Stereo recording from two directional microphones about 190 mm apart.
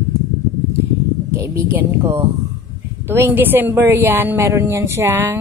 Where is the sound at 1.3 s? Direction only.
15° right (ahead or behind).